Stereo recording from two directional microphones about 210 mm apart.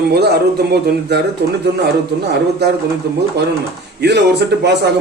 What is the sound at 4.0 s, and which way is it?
Speech, 55° right (ahead or behind).